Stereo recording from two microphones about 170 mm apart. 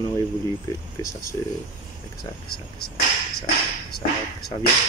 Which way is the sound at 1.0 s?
55° left (ahead or behind).